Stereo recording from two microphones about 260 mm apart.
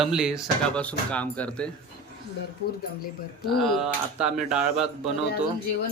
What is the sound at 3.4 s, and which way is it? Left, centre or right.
A man's voice, centre.